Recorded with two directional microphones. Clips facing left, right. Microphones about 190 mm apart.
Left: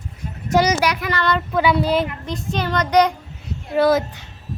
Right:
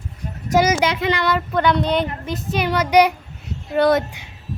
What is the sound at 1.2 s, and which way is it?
Speech, 5° right (ahead or behind).